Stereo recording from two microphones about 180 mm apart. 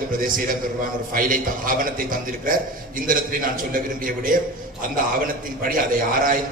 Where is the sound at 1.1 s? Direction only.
50° right (ahead or behind).